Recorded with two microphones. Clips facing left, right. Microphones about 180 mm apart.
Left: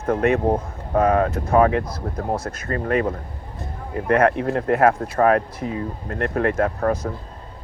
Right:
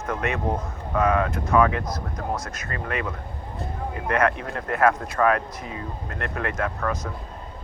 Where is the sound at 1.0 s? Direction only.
35° left (ahead or behind).